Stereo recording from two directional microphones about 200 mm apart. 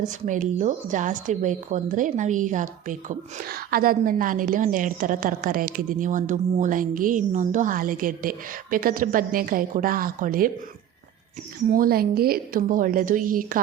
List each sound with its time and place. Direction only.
0.0 s speech: 40° right (ahead or behind)
11.7 s speech: 45° right (ahead or behind)